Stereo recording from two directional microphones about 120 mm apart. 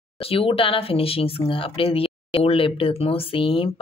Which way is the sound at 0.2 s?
50° left (ahead or behind).